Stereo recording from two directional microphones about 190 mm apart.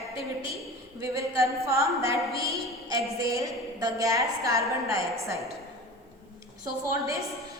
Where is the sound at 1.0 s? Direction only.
15° right (ahead or behind).